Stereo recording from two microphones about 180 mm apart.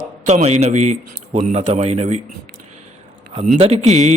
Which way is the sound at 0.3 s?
40° right (ahead or behind).